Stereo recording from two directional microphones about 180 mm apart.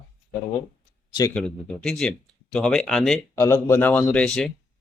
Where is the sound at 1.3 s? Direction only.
5° left (ahead or behind).